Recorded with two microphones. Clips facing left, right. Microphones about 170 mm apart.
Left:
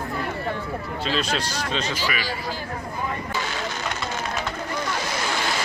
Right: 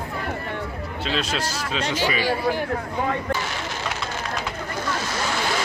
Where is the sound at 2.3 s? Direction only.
60° right (ahead or behind).